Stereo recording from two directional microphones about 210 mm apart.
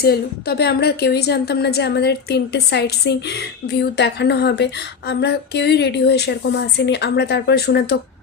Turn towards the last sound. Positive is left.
turn(degrees=50)  # may be behind; listen again after turning